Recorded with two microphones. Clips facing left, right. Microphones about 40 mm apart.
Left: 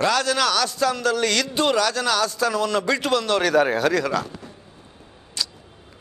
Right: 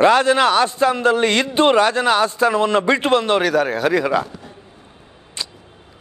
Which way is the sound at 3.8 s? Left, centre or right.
Centre.